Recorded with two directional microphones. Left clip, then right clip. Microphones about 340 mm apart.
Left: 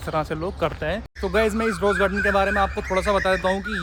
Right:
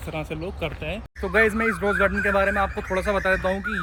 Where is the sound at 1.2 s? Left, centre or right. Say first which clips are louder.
Right 2 dB; centre.